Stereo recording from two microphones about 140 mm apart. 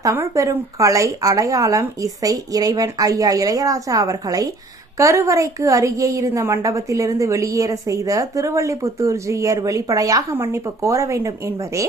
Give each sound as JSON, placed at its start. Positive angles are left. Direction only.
{"t": 0.0, "sound": "a woman's voice", "side_deg": -20}